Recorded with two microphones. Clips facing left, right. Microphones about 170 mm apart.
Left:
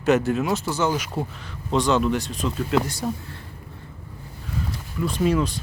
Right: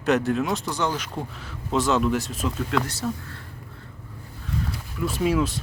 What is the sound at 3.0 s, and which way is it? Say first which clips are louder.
Speech: left 1 dB; 20° left (ahead or behind).